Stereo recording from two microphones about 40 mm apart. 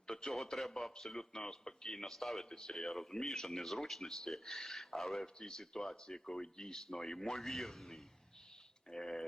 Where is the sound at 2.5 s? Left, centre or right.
Centre.